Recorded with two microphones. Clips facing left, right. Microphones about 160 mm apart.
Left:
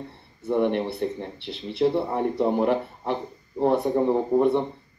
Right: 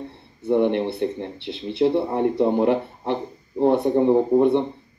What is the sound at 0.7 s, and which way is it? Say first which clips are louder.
Speech: right 3 dB; centre (ahead or behind).